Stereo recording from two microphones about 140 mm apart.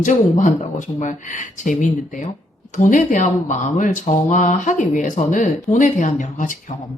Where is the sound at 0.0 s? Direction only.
60° left (ahead or behind).